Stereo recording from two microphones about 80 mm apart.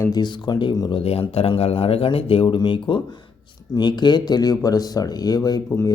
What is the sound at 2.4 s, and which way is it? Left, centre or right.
Speech, left.